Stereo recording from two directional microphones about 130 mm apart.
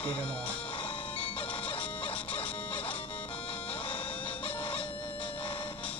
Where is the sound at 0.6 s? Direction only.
45° left (ahead or behind).